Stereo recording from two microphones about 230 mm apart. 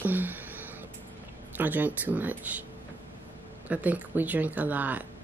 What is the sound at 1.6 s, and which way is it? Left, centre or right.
Speech, centre.